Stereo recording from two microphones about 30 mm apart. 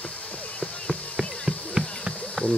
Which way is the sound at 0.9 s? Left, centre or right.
Centre.